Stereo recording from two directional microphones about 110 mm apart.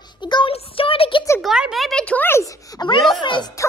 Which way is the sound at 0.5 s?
55° left (ahead or behind).